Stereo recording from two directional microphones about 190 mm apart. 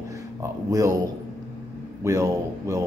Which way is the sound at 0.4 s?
15° right (ahead or behind).